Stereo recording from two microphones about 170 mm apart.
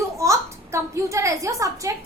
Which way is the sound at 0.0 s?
20° right (ahead or behind).